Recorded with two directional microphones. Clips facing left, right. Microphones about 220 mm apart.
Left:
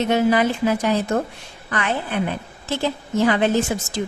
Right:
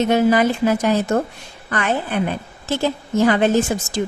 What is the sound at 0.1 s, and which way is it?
A woman's voice, 45° right (ahead or behind).